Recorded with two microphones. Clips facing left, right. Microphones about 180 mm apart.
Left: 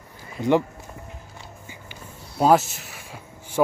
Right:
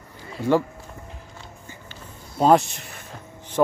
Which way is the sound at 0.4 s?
20° left (ahead or behind).